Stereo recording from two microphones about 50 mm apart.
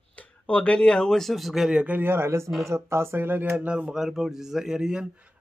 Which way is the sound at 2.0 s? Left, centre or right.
Right.